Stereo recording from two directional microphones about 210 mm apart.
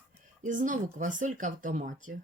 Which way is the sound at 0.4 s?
40° right (ahead or behind).